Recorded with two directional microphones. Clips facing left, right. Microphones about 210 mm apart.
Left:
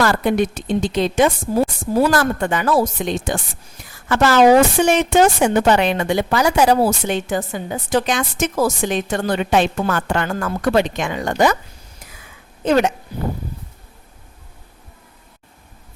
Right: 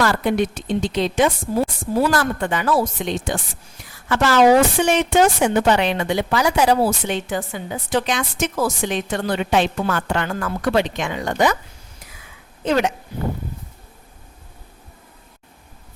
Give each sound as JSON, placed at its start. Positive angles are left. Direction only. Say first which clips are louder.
{"t": 0.0, "sound": "a woman's voice", "louder": "left 2 dB", "side_deg": 45}
{"t": 12.6, "sound": "a woman's voice", "louder": "left 3 dB", "side_deg": 45}